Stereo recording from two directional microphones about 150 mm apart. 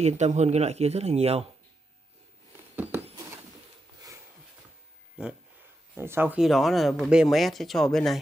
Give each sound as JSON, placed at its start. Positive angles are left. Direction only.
{"t": 0.0, "sound": "speech", "side_deg": -50}
{"t": 2.7, "sound": "a sound", "side_deg": -10}
{"t": 5.9, "sound": "speech", "side_deg": -15}
{"t": 6.4, "sound": "speech", "side_deg": 0}